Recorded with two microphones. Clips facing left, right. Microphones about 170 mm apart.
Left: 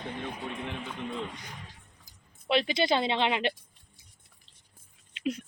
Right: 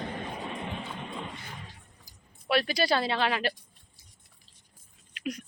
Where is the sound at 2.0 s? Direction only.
20° left (ahead or behind).